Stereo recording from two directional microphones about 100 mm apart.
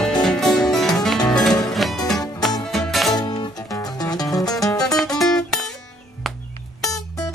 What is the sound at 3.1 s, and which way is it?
Music, 45° left (ahead or behind).